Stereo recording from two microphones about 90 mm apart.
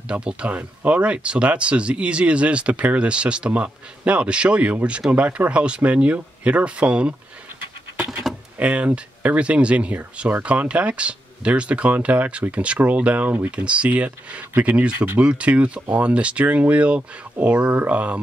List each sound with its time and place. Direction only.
0.1 s speech: 10° right (ahead or behind)
8.5 s speech: 15° right (ahead or behind)